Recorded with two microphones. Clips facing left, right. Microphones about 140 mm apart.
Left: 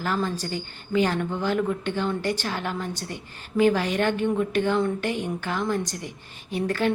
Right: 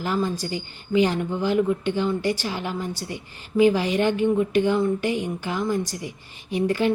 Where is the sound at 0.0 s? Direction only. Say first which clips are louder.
Right 2 dB; 10° right (ahead or behind).